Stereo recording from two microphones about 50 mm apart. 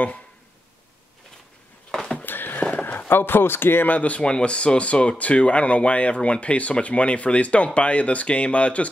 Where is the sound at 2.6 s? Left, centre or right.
Left.